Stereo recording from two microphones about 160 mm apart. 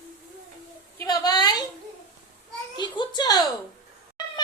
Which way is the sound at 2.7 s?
30° left (ahead or behind).